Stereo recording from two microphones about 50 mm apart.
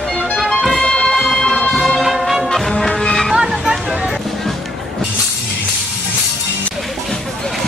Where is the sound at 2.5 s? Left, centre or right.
Centre.